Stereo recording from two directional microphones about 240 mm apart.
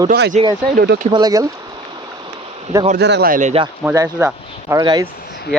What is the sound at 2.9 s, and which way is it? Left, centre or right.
Speech, right.